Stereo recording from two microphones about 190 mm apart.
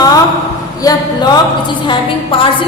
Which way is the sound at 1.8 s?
25° left (ahead or behind).